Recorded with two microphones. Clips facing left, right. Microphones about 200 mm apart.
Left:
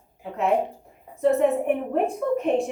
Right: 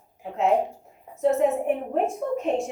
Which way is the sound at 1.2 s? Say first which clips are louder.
Left 1 dB; 60° left (ahead or behind).